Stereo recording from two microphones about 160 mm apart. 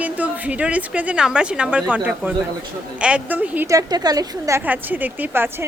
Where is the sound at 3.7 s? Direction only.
25° right (ahead or behind).